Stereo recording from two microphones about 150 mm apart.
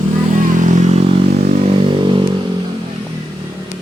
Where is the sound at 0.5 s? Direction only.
55° right (ahead or behind).